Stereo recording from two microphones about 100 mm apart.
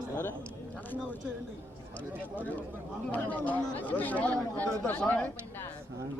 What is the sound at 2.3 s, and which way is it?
Speech, 15° left (ahead or behind).